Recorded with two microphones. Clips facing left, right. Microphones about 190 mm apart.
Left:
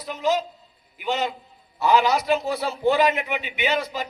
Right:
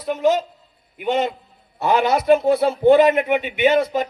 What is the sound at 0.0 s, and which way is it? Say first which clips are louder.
A man's voice: right 5 dB; 55° right (ahead or behind).